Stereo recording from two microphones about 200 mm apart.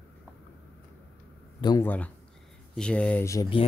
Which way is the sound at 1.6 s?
20° left (ahead or behind).